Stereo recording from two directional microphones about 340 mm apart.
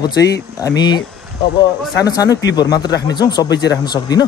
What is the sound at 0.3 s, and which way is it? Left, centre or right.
Speech, centre.